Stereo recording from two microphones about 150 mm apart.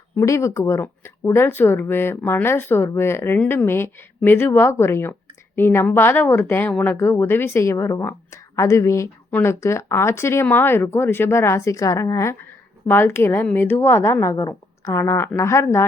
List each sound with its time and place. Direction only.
0.2 s a woman's voice: 20° left (ahead or behind)